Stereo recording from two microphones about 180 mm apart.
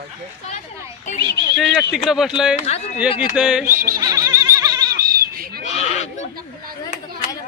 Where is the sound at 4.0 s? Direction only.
20° right (ahead or behind).